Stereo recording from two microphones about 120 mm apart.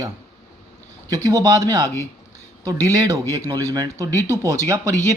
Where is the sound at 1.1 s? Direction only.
30° right (ahead or behind).